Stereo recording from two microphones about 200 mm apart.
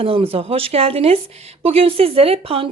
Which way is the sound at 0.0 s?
30° right (ahead or behind).